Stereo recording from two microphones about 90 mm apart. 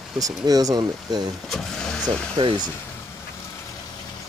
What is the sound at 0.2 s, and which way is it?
Speech, 40° right (ahead or behind).